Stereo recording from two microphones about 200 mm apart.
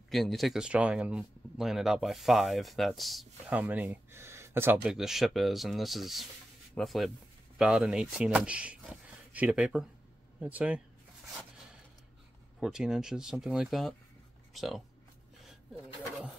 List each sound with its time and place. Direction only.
0.1 s speech: centre (ahead or behind)
12.5 s speech: centre (ahead or behind)
15.4 s a sound: centre (ahead or behind)